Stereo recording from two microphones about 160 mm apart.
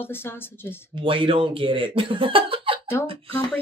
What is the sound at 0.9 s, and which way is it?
Speech, 30° right (ahead or behind).